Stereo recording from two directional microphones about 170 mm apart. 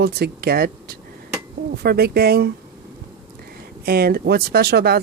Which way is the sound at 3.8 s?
65° right (ahead or behind).